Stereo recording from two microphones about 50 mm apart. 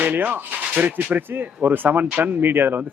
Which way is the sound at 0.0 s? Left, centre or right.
Right.